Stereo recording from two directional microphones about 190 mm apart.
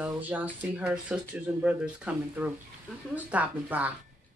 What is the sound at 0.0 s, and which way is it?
Speech, 10° right (ahead or behind).